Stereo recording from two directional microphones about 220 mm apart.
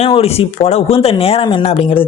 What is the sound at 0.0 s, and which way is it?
Speech, 25° left (ahead or behind).